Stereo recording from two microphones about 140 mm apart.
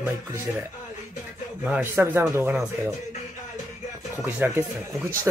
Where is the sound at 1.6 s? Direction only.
10° right (ahead or behind).